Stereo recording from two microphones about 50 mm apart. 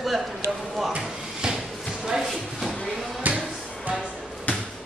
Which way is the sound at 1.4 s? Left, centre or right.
Centre.